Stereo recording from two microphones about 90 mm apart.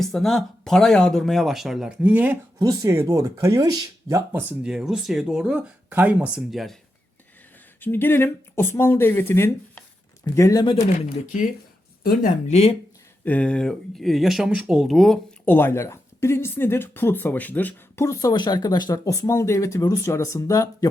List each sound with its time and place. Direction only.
0.0 s speech: 5° left (ahead or behind)
2.0 s speech: 15° right (ahead or behind)
2.6 s speech: 35° right (ahead or behind)
4.6 s speech: 10° right (ahead or behind)
6.1 s speech: 10° right (ahead or behind)
7.8 s speech: 25° left (ahead or behind)
10.2 s speech: 40° left (ahead or behind)
10.6 s speech: 65° left (ahead or behind)
13.2 s speech: 15° left (ahead or behind)
15.4 s speech: 25° left (ahead or behind)
18.0 s speech: 35° left (ahead or behind)
18.3 s speech: 50° left (ahead or behind)
19.1 s speech: 35° left (ahead or behind)